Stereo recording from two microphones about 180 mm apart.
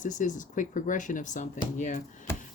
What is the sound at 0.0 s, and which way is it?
Speech, 45° left (ahead or behind).